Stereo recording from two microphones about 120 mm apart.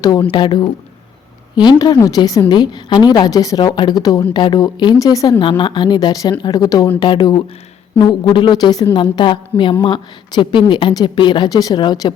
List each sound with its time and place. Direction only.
0.2 s a woman's voice: 40° left (ahead or behind)
5.4 s a woman's voice: 40° left (ahead or behind)